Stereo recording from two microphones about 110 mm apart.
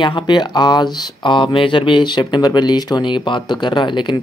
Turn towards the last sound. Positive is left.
turn(degrees=45)  # may be behind; listen again after turning